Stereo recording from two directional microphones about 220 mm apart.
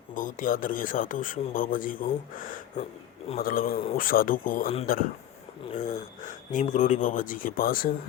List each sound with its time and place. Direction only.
0.1 s speech: 35° left (ahead or behind)
5.7 s speech: 35° left (ahead or behind)